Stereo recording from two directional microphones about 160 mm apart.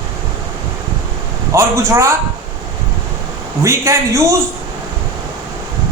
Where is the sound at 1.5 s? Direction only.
15° right (ahead or behind).